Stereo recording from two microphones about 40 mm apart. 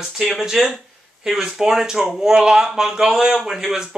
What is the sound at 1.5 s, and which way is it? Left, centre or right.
Speech, centre.